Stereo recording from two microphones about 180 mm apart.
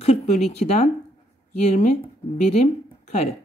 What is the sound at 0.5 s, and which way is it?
Speech, 40° left (ahead or behind).